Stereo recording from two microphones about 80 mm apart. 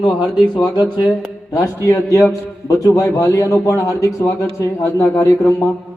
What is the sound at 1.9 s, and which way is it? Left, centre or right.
A man's voice, left.